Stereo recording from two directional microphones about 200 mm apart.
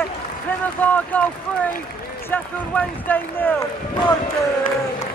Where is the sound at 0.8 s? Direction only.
10° left (ahead or behind).